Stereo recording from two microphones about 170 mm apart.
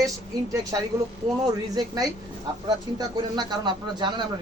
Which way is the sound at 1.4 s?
25° right (ahead or behind).